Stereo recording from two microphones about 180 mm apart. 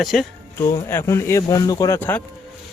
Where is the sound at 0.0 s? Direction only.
Centre (ahead or behind).